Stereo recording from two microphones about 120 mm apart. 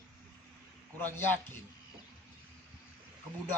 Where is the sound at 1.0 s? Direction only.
15° left (ahead or behind).